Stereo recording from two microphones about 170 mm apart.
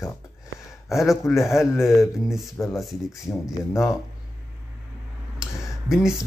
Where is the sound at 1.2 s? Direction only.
15° left (ahead or behind).